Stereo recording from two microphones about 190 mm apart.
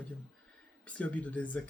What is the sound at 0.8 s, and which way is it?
Speech, 5° left (ahead or behind).